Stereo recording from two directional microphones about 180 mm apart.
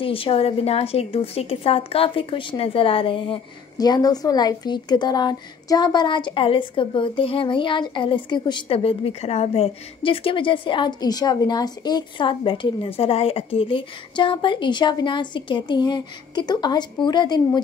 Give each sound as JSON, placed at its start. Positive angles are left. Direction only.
{"t": 0.0, "sound": "a woman's voice", "side_deg": 30}